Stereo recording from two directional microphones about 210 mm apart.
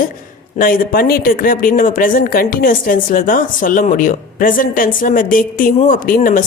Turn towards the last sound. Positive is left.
turn(degrees=40)  # may be behind; listen again after turning